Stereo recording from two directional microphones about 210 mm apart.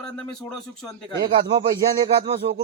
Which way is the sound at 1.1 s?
20° right (ahead or behind).